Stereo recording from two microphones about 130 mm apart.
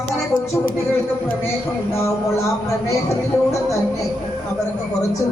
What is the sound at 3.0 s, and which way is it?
Speech, 25° left (ahead or behind).